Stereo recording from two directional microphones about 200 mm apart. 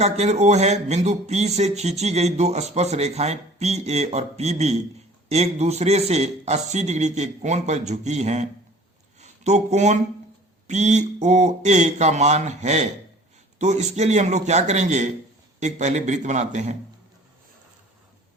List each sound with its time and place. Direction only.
0.0 s speech: 35° right (ahead or behind)